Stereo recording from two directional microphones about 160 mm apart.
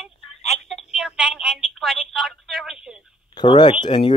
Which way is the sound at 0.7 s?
Centre (ahead or behind).